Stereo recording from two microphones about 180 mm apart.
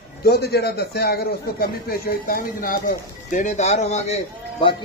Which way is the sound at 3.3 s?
40° left (ahead or behind).